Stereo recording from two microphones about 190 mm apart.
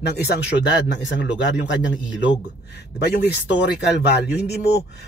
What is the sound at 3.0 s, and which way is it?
Speech, 60° left (ahead or behind).